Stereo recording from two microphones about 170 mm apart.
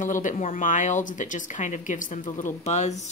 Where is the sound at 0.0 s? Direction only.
50° left (ahead or behind).